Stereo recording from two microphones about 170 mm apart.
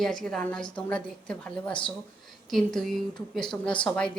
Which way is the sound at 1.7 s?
30° left (ahead or behind).